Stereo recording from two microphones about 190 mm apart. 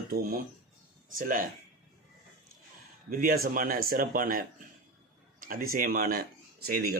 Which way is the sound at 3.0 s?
50° right (ahead or behind).